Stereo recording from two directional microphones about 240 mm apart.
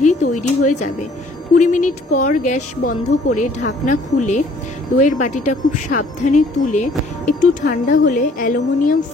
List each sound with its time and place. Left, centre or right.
0.0 s a woman's voice: left